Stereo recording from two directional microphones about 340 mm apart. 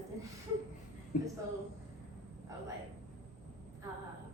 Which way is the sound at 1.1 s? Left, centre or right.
Left.